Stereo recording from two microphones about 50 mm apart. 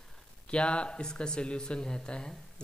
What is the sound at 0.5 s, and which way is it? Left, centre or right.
Speech, left.